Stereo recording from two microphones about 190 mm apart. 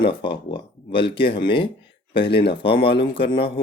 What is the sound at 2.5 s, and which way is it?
Speech, 25° left (ahead or behind).